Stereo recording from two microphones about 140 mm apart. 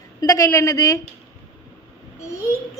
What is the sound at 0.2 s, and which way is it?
Speech, 25° left (ahead or behind).